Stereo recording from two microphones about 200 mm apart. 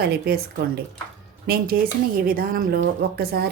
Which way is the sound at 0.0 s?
50° right (ahead or behind).